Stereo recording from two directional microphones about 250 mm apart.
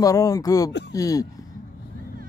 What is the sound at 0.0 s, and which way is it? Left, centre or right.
A man's voice, centre.